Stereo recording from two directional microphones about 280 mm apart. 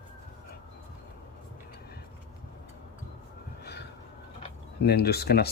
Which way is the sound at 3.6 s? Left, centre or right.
Left.